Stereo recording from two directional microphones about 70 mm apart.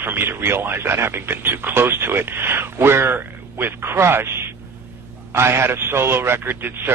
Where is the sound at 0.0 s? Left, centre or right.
Right.